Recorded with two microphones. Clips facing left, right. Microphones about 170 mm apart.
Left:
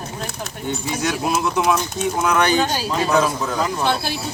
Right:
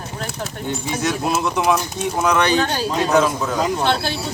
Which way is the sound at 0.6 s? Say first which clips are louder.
Even; centre (ahead or behind).